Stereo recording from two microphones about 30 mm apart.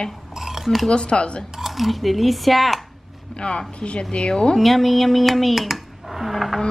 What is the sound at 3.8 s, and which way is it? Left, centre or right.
Speech, left.